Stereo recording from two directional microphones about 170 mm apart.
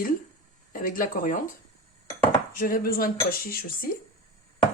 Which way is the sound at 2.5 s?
55° left (ahead or behind).